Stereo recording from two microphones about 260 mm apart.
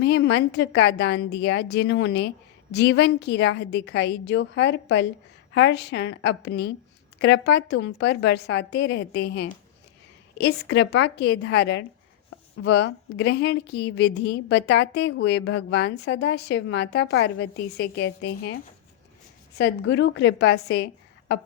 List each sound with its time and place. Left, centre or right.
0.0 s a woman's voice: left